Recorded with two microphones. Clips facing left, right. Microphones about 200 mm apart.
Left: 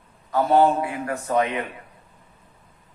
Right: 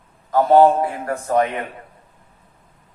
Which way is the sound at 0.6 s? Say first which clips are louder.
Right 5 dB; 40° right (ahead or behind).